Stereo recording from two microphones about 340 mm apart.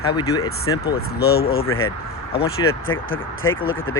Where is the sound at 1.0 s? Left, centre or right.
Left.